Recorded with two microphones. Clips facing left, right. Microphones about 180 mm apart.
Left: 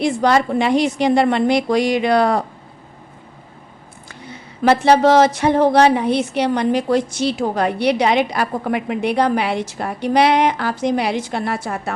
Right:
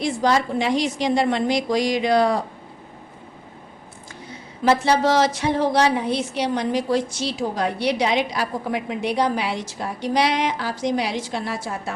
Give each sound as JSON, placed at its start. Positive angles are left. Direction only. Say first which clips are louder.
{"t": 0.0, "sound": "a woman's voice", "louder": "left 4 dB", "side_deg": 65}
{"t": 4.6, "sound": "a woman's voice", "louder": "left 5 dB", "side_deg": 60}